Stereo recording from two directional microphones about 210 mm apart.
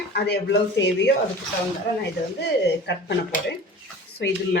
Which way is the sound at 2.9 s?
55° left (ahead or behind).